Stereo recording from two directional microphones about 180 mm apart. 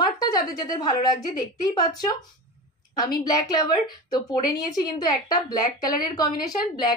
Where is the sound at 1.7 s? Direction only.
20° left (ahead or behind).